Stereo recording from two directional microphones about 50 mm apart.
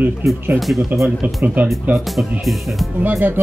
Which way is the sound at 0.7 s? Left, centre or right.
Right.